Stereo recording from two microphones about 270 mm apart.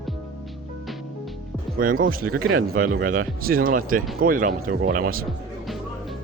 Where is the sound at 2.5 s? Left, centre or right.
Right.